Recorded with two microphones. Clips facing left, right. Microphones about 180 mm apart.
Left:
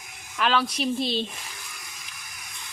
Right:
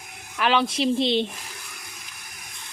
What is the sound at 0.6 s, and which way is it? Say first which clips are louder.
Speech: right 4 dB; 25° right (ahead or behind).